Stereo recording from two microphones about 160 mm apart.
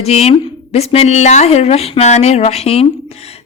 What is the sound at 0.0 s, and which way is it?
A woman's voice, 40° left (ahead or behind).